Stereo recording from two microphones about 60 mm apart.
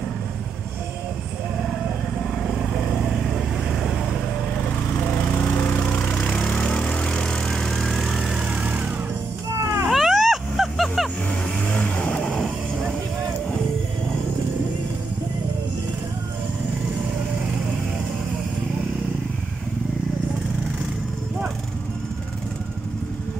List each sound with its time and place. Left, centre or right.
3.0 s vehicle: centre
4.9 s lawn mower: left
6.2 s vehicle: centre
8.5 s vehicle: right
9.5 s cat: right
9.8 s music: centre
11.7 s vehicle: centre